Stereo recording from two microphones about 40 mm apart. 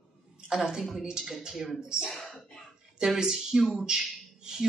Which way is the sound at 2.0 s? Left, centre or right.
Centre.